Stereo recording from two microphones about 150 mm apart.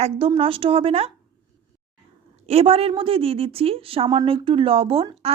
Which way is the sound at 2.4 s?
40° right (ahead or behind).